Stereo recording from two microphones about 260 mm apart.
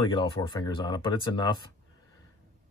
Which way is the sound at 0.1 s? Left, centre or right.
Centre.